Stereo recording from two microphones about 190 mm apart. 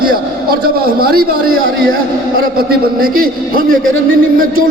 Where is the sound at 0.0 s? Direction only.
50° right (ahead or behind).